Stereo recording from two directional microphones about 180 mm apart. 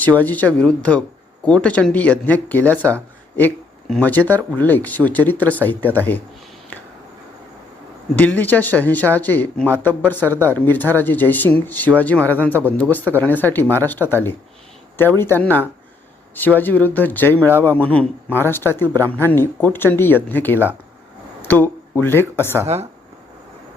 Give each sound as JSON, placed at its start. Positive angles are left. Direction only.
{"t": 0.0, "sound": "speech", "side_deg": 10}
{"t": 8.1, "sound": "speech", "side_deg": 10}
{"t": 22.6, "sound": "speech", "side_deg": -35}